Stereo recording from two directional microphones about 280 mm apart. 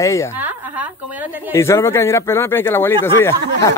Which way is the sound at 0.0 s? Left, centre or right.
Centre.